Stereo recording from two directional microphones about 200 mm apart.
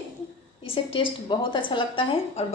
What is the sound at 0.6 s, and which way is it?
A woman's voice, 25° left (ahead or behind).